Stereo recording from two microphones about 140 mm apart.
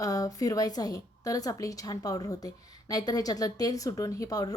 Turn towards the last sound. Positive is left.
turn(degrees=25)  # may be behind; listen again after turning